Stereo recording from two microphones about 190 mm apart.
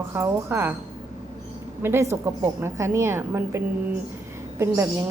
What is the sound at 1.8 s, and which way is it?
A woman's voice, 15° right (ahead or behind).